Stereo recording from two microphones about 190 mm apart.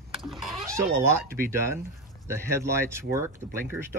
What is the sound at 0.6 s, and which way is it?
Speech, 15° right (ahead or behind).